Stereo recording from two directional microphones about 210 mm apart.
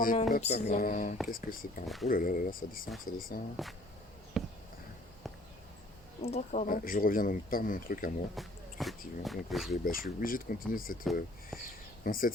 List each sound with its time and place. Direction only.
0.0 s speech: 40° left (ahead or behind)
4.4 s a sound: centre (ahead or behind)
6.2 s speech: 30° left (ahead or behind)
8.4 s speech: centre (ahead or behind)
9.8 s speech: 40° left (ahead or behind)
11.0 s speech: centre (ahead or behind)
12.0 s speech: 40° left (ahead or behind)